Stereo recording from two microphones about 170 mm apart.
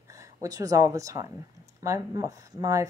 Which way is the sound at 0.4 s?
20° right (ahead or behind).